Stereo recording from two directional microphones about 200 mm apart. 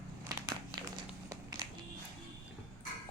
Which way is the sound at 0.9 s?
20° right (ahead or behind).